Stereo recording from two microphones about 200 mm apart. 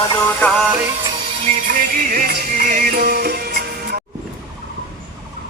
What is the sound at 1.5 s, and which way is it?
Music, 45° right (ahead or behind).